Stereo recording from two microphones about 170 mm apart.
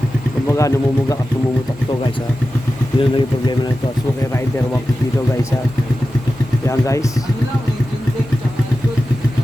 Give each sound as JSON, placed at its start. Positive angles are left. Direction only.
{"t": 0.4, "sound": "speech", "side_deg": 20}
{"t": 3.0, "sound": "speech", "side_deg": 25}
{"t": 6.7, "sound": "speech", "side_deg": 20}